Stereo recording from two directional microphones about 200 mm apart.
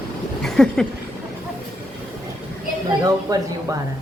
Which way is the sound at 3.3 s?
15° right (ahead or behind).